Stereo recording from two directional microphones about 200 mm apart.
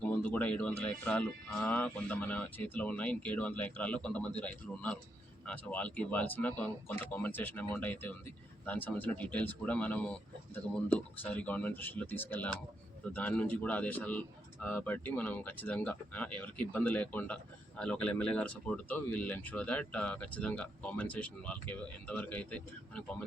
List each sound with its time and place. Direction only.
0.0 s speech: 10° left (ahead or behind)